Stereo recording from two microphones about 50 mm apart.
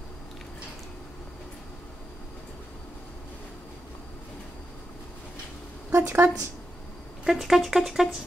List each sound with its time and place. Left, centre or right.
5.9 s speech: right
7.2 s speech: centre